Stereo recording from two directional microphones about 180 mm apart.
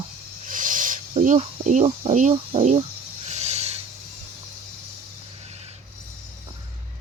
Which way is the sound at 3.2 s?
40° right (ahead or behind).